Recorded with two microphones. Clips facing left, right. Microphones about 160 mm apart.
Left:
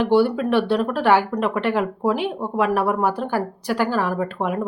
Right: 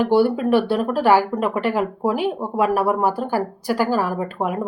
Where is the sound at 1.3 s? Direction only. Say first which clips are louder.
Even; centre (ahead or behind).